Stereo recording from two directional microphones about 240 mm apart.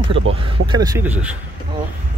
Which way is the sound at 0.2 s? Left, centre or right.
Right.